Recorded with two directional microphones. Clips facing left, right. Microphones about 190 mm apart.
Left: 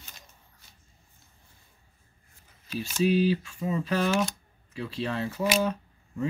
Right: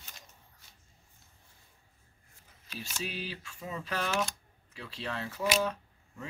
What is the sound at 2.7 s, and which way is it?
Speech, 10° left (ahead or behind).